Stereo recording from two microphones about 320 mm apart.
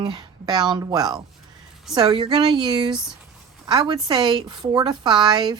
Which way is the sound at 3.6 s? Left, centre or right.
Centre.